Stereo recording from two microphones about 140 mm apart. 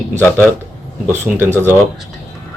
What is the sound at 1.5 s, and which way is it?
Speech, 15° right (ahead or behind).